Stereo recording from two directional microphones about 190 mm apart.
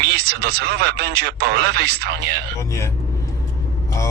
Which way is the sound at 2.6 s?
15° left (ahead or behind).